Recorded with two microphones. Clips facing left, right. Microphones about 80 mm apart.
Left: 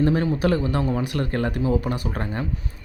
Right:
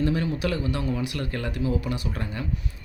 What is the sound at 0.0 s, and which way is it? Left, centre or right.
Speech, left.